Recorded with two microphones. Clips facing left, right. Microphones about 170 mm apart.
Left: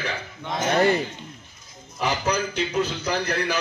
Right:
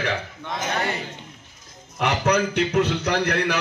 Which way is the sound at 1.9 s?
65° right (ahead or behind).